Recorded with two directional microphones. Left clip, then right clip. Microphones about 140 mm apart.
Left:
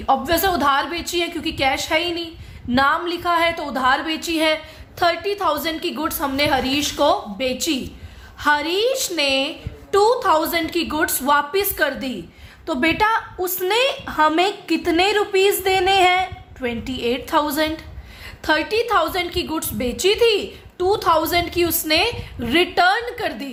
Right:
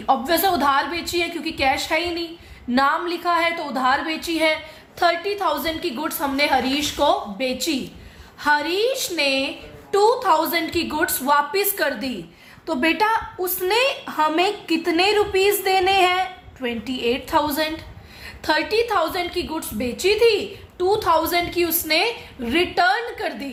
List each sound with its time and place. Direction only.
0.0 s a woman's voice: 25° left (ahead or behind)